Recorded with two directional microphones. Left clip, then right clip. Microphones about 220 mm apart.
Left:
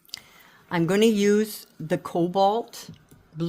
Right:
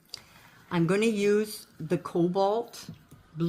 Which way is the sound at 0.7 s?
50° left (ahead or behind).